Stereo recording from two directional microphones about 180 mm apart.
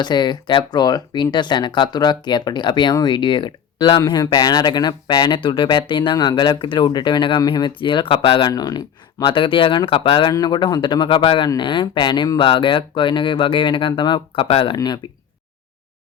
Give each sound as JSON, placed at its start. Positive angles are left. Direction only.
{"t": 0.0, "sound": "speech", "side_deg": 25}